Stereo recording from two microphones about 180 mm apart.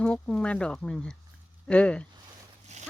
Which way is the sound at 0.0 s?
5° left (ahead or behind).